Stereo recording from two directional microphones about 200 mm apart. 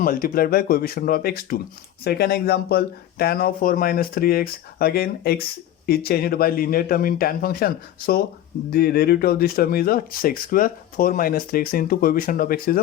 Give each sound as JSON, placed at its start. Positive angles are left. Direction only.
{"t": 0.0, "sound": "speech", "side_deg": 45}